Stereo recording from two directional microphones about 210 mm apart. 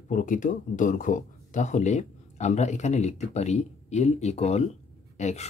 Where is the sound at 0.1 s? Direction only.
40° left (ahead or behind).